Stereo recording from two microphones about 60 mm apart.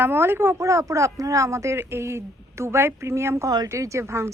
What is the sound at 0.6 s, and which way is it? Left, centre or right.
A woman's voice, right.